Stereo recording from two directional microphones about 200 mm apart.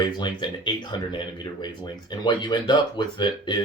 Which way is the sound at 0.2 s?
25° left (ahead or behind).